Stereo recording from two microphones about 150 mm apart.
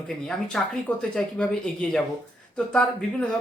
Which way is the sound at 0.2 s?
5° left (ahead or behind).